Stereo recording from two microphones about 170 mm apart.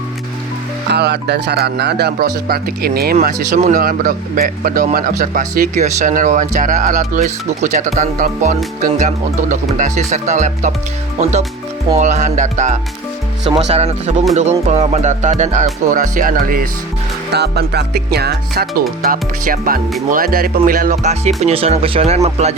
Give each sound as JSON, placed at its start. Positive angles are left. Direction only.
{"t": 0.9, "sound": "speech", "side_deg": -80}
{"t": 3.5, "sound": "speech", "side_deg": -45}
{"t": 3.8, "sound": "speech", "side_deg": -60}
{"t": 17.3, "sound": "speech", "side_deg": -75}
{"t": 19.1, "sound": "speech", "side_deg": -55}